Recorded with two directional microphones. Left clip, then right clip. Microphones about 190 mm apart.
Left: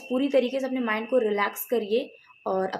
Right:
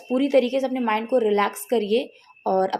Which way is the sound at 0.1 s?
35° right (ahead or behind).